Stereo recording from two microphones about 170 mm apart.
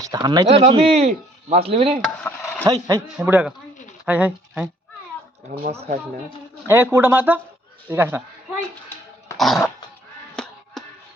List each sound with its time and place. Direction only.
0.0 s speech: 25° right (ahead or behind)
0.4 s speech: 45° right (ahead or behind)
2.2 s mechanisms: 10° left (ahead or behind)
2.6 s speech: 20° right (ahead or behind)
3.2 s speech: 10° right (ahead or behind)
5.7 s speech: 35° right (ahead or behind)
6.7 s speech: 15° right (ahead or behind)
9.4 s cough: centre (ahead or behind)
10.3 s music: 5° left (ahead or behind)